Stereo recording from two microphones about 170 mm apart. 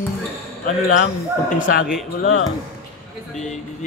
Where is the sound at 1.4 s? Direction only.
50° left (ahead or behind).